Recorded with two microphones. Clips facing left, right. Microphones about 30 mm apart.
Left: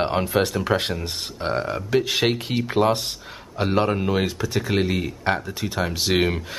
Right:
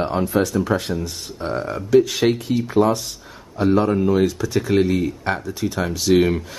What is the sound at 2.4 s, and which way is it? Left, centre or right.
Speech, left.